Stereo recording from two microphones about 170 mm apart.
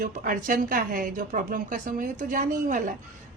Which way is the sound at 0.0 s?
50° right (ahead or behind).